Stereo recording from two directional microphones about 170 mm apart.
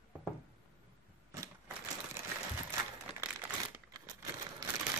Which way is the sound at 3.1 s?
5° right (ahead or behind).